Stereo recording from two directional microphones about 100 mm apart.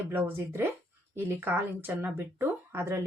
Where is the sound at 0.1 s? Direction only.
20° right (ahead or behind).